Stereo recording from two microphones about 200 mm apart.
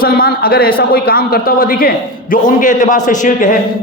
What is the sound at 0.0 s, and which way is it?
A man's voice, 50° left (ahead or behind).